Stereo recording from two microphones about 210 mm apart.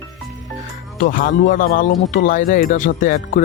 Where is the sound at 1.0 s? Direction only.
40° left (ahead or behind).